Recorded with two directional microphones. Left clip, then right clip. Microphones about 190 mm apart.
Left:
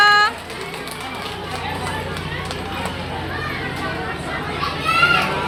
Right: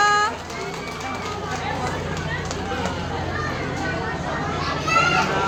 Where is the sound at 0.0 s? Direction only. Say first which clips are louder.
Left 5 dB; 10° right (ahead or behind).